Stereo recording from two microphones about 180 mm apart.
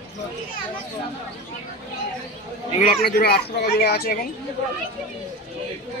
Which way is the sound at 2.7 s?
50° left (ahead or behind).